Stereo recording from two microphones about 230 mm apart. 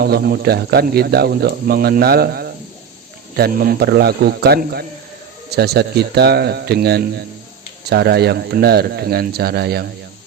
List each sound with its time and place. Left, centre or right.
0.0 s speech: right